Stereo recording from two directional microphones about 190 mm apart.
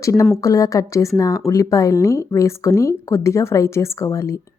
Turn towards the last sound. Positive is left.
turn(degrees=15)  # may be behind; listen again after turning